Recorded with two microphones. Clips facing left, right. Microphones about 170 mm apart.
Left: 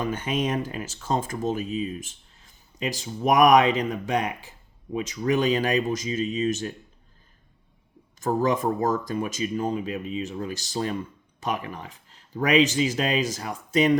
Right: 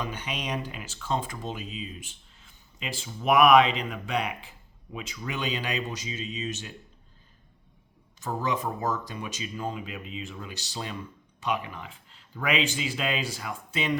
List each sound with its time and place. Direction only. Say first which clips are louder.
0.0 s speech: left 8 dB; 45° left (ahead or behind)
8.2 s speech: left 7 dB; 45° left (ahead or behind)